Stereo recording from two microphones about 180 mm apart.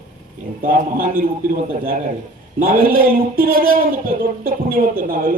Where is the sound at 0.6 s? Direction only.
50° right (ahead or behind).